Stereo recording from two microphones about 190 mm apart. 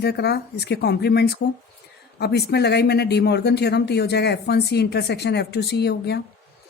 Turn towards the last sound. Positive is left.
turn(degrees=60)  # may be behind; listen again after turning